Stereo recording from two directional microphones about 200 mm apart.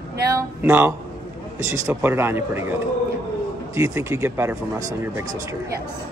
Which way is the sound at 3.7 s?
15° right (ahead or behind).